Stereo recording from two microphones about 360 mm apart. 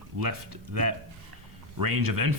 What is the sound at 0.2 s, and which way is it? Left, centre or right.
Speech, right.